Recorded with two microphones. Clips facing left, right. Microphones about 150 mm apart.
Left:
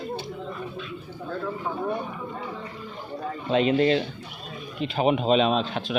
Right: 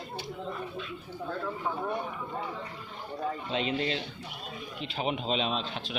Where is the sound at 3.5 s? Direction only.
55° left (ahead or behind).